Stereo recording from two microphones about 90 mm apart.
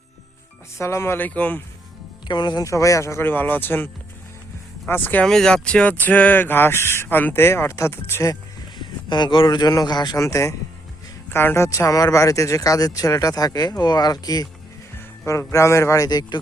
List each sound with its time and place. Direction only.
0.8 s speech: 30° left (ahead or behind)
1.3 s speech: 15° left (ahead or behind)
2.2 s speech: 55° left (ahead or behind)
2.6 s speech: 35° left (ahead or behind)
3.2 s speech: 20° left (ahead or behind)
4.9 s speech: 20° left (ahead or behind)
5.2 s speech: 5° left (ahead or behind); by 8.4 s 35° left (ahead or behind)
8.8 s speech: 55° left (ahead or behind)
10.2 s speech: 35° left (ahead or behind)
15.5 s speech: 35° left (ahead or behind)
16.0 s speech: 50° left (ahead or behind)